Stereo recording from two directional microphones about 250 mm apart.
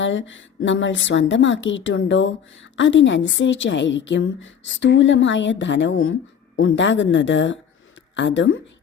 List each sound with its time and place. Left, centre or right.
0.0 s a woman's voice: left